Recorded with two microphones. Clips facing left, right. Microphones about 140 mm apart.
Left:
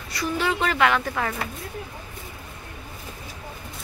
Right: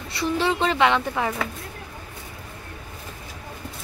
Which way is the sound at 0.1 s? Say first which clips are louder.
Right 2 dB; 25° right (ahead or behind).